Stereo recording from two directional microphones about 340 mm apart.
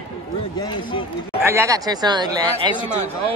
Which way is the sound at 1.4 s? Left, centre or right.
Centre.